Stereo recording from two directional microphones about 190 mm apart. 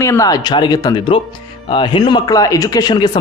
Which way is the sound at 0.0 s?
15° left (ahead or behind).